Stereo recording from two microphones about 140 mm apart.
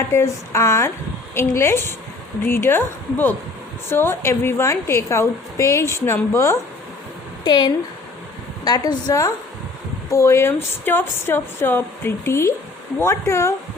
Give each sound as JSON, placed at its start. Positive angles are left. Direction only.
{"t": 0.1, "sound": "a woman's voice", "side_deg": 20}
{"t": 7.4, "sound": "a woman's voice", "side_deg": 30}